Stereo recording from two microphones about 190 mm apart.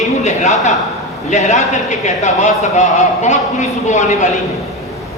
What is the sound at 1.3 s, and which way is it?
A man's voice, 40° left (ahead or behind).